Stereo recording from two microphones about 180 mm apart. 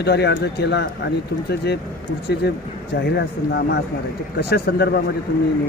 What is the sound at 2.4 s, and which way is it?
Speech, 70° left (ahead or behind).